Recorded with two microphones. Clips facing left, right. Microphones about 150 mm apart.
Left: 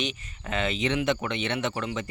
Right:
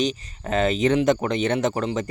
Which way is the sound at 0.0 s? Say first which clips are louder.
Right 8 dB; 40° right (ahead or behind).